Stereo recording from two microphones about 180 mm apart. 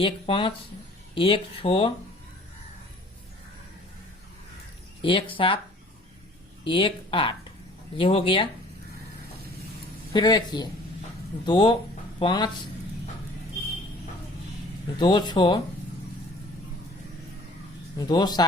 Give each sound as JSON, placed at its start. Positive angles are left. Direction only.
{"t": 0.0, "sound": "speech", "side_deg": 30}
{"t": 5.0, "sound": "speech", "side_deg": 30}
{"t": 6.7, "sound": "speech", "side_deg": 30}
{"t": 10.1, "sound": "speech", "side_deg": 25}
{"t": 14.9, "sound": "speech", "side_deg": 25}
{"t": 17.9, "sound": "speech", "side_deg": 20}